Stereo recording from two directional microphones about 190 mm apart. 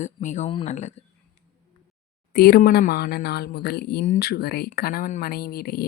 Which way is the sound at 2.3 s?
55° left (ahead or behind).